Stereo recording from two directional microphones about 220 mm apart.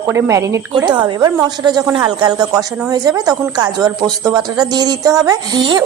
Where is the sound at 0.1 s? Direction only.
10° right (ahead or behind).